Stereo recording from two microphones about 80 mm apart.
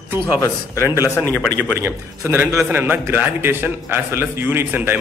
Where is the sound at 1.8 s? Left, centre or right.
Right.